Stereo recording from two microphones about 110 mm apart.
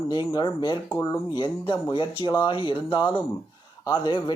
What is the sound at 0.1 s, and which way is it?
Speech, 40° left (ahead or behind).